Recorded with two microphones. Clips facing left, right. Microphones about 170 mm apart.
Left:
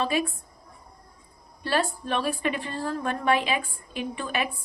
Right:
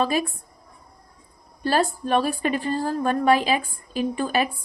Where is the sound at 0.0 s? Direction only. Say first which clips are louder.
Right 3 dB; 40° right (ahead or behind).